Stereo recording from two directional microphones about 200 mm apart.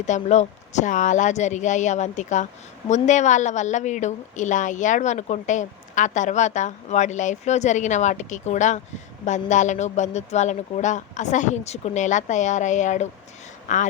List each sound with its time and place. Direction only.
0.0 s a woman's voice: 35° left (ahead or behind)